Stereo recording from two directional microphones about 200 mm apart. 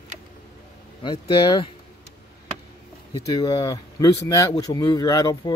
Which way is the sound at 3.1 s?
20° left (ahead or behind).